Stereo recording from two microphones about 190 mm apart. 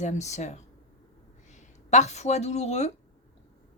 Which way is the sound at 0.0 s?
40° left (ahead or behind).